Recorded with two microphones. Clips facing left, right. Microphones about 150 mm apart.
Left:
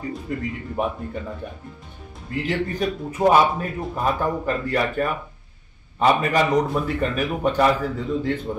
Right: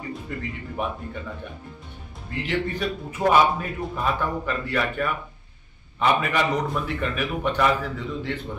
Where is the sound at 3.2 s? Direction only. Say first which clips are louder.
Left 2 dB; 45° left (ahead or behind).